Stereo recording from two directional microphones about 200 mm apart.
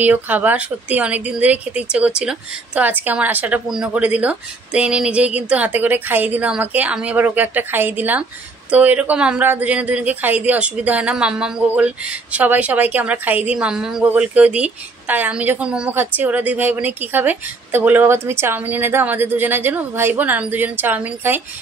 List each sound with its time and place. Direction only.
0.0 s speech: 10° right (ahead or behind)